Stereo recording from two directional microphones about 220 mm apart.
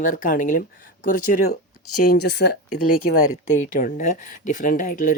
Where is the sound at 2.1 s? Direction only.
45° left (ahead or behind).